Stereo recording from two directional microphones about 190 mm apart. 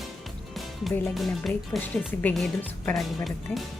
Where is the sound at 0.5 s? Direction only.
Centre (ahead or behind).